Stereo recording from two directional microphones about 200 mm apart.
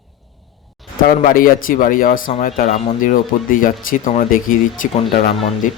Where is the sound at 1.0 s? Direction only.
45° left (ahead or behind).